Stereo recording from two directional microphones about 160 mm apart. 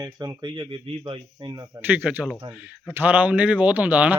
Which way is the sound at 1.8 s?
10° right (ahead or behind).